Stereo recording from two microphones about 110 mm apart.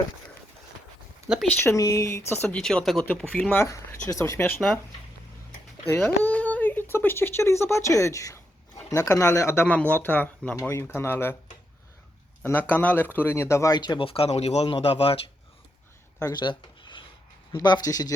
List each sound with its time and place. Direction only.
1.3 s speech: 5° right (ahead or behind)
1.6 s speech: 30° left (ahead or behind)
2.5 s speech: 5° left (ahead or behind)
3.6 s speech: 30° left (ahead or behind)
5.9 s speech: 15° left (ahead or behind)
12.5 s speech: 15° left (ahead or behind); by 14.1 s 40° left (ahead or behind)
14.1 s speech: 65° left (ahead or behind)
16.2 s speech: 45° left (ahead or behind)